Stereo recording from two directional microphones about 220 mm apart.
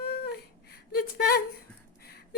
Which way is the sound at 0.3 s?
45° left (ahead or behind).